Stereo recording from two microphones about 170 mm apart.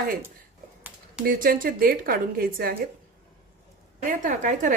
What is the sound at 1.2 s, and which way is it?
A woman's voice, 55° right (ahead or behind).